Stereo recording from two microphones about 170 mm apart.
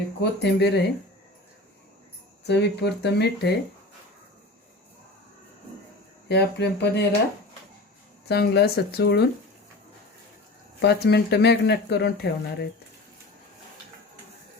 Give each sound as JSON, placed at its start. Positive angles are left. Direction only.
{"t": 0.2, "sound": "speech", "side_deg": 80}
{"t": 2.5, "sound": "speech", "side_deg": 80}
{"t": 6.2, "sound": "speech", "side_deg": 80}
{"t": 8.3, "sound": "speech", "side_deg": 70}
{"t": 10.8, "sound": "speech", "side_deg": 75}